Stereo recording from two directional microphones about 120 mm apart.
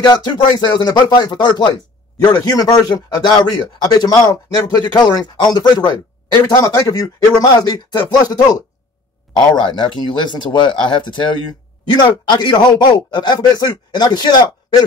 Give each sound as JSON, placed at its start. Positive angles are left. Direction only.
{"t": 0.0, "sound": "speech", "side_deg": 40}
{"t": 9.8, "sound": "speech", "side_deg": 40}